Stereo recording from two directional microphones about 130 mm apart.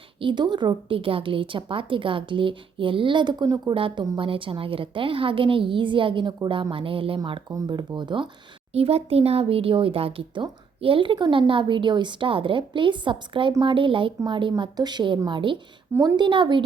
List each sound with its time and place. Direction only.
0.2 s a woman's voice: 35° right (ahead or behind)
3.8 s a woman's voice: 40° right (ahead or behind)
7.5 s a woman's voice: 35° right (ahead or behind)
8.7 s a woman's voice: 50° right (ahead or behind)